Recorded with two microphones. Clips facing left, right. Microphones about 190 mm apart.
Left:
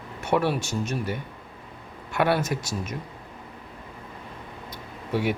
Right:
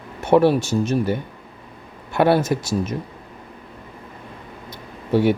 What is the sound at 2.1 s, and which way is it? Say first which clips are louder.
Speech: right 7 dB; 30° right (ahead or behind).